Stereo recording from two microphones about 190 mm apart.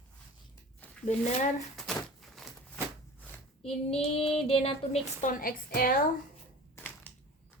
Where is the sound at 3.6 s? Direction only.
30° left (ahead or behind).